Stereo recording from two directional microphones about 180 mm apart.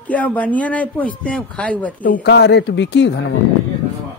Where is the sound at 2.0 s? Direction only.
50° left (ahead or behind).